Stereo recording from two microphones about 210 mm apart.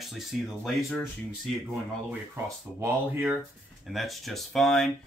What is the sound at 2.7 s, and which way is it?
Speech, 10° right (ahead or behind).